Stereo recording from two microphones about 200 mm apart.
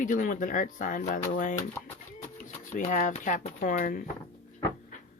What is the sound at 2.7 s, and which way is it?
Speech, 40° left (ahead or behind).